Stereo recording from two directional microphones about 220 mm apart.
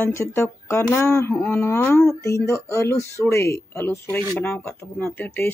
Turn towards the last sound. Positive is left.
turn(degrees=10)  # may be behind; listen again after turning